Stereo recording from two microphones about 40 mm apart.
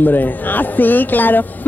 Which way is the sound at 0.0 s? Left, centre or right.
Left.